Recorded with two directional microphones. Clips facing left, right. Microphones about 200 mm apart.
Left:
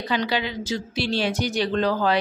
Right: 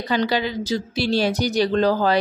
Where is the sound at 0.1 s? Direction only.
40° right (ahead or behind).